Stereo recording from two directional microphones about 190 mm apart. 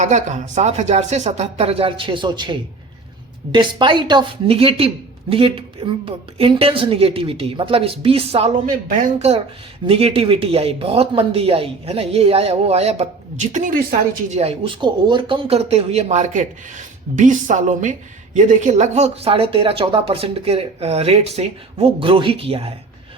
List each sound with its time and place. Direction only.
0.0 s a man's voice: 40° right (ahead or behind)